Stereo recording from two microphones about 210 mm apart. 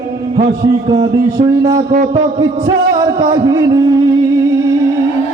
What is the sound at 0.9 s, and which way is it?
Speech, 20° right (ahead or behind).